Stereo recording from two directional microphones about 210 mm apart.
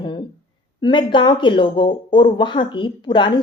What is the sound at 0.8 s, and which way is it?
Speech, 20° left (ahead or behind).